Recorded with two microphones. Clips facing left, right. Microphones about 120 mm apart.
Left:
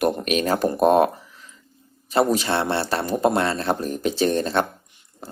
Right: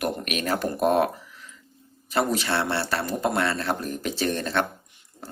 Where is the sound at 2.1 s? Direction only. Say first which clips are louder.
Left 4 dB; 20° left (ahead or behind).